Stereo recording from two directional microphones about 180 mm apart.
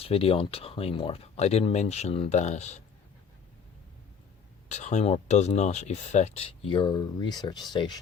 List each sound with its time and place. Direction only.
0.0 s speech: 30° left (ahead or behind)
4.7 s speech: 40° left (ahead or behind); by 7.9 s 25° left (ahead or behind)